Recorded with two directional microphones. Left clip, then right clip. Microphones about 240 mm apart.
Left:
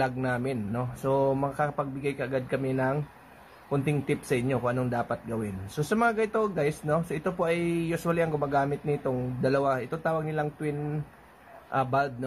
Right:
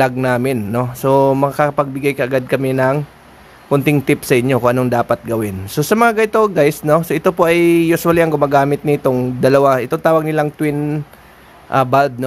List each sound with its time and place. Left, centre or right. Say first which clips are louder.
0.0 s a man's voice: right 14 dB; right